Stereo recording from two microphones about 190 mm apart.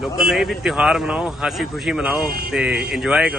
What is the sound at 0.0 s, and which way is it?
Speech, centre (ahead or behind).